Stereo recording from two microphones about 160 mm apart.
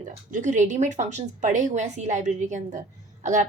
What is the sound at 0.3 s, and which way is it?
A woman's voice, 50° right (ahead or behind).